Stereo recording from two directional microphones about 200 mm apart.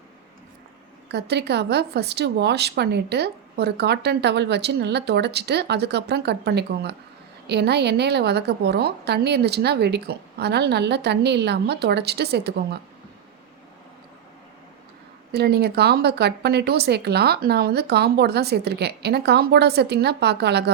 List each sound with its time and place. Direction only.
1.0 s speech: 60° right (ahead or behind)
15.3 s speech: 55° right (ahead or behind)